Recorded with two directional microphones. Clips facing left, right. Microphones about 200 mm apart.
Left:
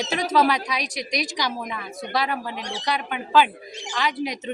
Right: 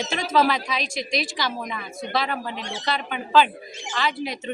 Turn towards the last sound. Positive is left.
turn(degrees=15)  # may be behind; listen again after turning